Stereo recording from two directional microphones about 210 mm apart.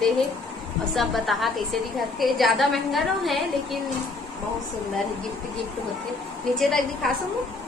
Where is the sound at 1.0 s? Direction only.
Centre (ahead or behind).